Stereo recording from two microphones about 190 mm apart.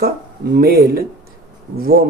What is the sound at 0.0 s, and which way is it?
A man's voice, 55° right (ahead or behind).